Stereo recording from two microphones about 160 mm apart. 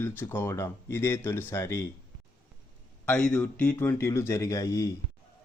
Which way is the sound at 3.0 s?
5° left (ahead or behind).